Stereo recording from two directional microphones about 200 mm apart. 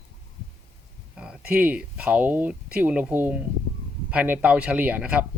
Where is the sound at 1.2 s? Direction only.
5° right (ahead or behind).